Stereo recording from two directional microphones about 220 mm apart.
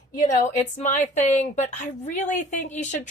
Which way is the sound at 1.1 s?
35° left (ahead or behind).